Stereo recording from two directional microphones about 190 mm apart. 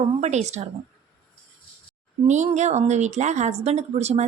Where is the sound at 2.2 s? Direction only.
40° right (ahead or behind).